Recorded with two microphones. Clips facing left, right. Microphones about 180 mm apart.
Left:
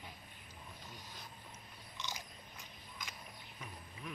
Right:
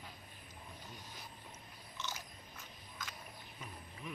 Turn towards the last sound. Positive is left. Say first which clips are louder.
# right 1 dB
turn(degrees=0)  # may be behind; listen again after turning